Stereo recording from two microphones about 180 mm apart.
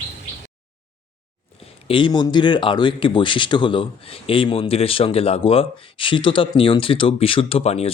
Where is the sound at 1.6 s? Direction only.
30° left (ahead or behind).